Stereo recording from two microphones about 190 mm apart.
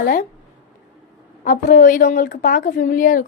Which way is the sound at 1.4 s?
45° left (ahead or behind).